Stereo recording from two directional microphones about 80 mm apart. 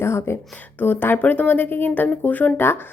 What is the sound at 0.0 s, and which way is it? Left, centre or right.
A woman's voice, left.